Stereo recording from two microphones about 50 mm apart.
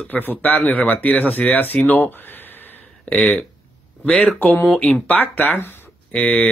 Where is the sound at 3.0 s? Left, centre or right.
Left.